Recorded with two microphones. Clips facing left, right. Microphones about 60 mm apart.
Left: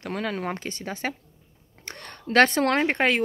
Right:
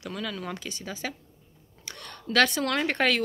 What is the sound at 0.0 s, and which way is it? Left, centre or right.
A woman's voice, left.